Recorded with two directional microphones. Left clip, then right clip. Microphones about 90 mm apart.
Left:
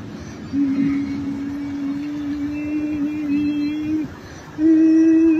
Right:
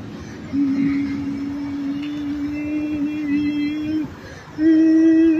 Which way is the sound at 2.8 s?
35° right (ahead or behind).